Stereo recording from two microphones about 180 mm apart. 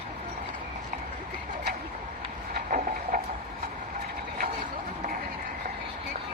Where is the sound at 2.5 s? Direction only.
50° right (ahead or behind).